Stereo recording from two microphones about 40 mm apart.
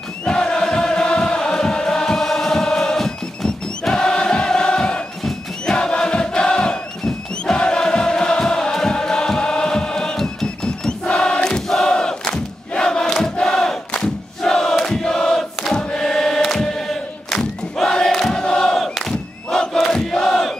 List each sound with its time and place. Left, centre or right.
0.3 s chant: centre
5.7 s crowd: left
7.4 s music: left
10.2 s choir: left
11.9 s crowd: centre